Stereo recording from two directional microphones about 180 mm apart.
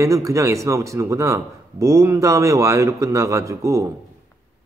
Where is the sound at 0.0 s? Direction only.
15° right (ahead or behind).